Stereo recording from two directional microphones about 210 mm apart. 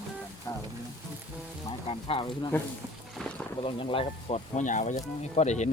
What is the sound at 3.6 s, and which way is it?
Speech, 25° left (ahead or behind).